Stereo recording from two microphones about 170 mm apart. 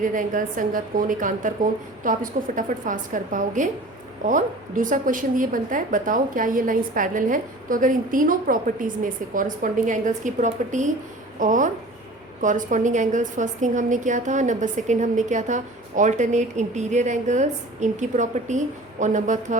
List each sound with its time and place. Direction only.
0.0 s a woman's voice: 50° right (ahead or behind)